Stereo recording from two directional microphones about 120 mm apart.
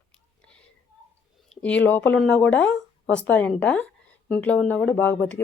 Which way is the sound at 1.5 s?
10° left (ahead or behind).